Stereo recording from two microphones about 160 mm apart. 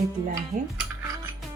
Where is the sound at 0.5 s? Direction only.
40° right (ahead or behind).